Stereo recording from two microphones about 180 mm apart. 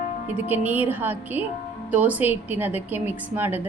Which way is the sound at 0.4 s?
10° right (ahead or behind).